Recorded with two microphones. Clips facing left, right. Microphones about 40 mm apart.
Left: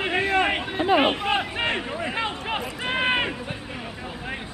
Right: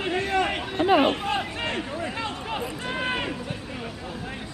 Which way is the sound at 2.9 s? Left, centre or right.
Left.